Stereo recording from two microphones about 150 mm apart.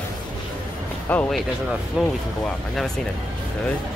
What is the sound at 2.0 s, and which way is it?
Speech, 5° right (ahead or behind).